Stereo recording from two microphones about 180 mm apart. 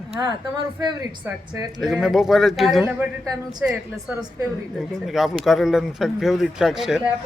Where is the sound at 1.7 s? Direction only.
Centre (ahead or behind).